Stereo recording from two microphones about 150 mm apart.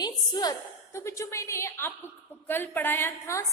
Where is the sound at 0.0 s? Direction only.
25° left (ahead or behind).